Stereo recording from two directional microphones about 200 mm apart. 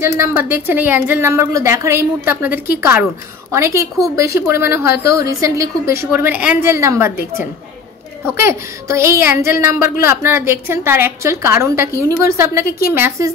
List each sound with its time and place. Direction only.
0.0 s a woman's voice: 15° right (ahead or behind)